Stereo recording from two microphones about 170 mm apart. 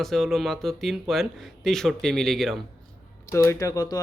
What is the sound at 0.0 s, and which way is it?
Speech, centre (ahead or behind).